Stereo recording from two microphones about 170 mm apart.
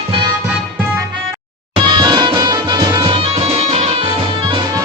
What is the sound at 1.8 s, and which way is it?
Music, 25° right (ahead or behind).